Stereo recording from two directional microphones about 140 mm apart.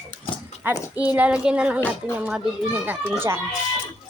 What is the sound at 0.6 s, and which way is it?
A child's voice, 15° right (ahead or behind).